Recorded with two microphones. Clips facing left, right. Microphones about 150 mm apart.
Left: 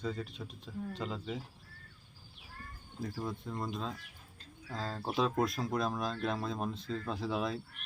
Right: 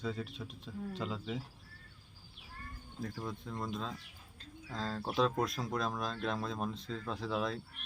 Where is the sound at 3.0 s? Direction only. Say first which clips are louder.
Left 2 dB; 5° left (ahead or behind).